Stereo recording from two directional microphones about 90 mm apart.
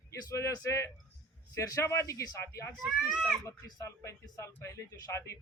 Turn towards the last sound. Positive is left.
turn(degrees=30)  # may be behind; listen again after turning